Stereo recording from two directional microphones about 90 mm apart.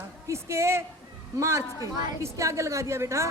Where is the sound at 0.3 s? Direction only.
30° right (ahead or behind).